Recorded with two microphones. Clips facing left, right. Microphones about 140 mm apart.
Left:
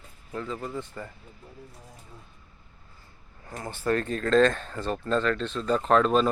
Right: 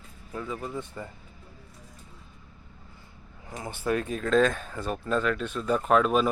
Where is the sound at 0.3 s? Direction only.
10° right (ahead or behind).